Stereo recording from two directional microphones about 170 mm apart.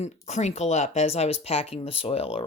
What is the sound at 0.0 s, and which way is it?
Speech, 40° left (ahead or behind).